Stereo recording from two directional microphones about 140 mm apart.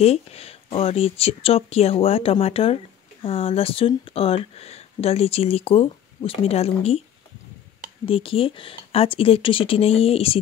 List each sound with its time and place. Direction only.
0.0 s speech: 45° left (ahead or behind)
8.0 s speech: 40° left (ahead or behind)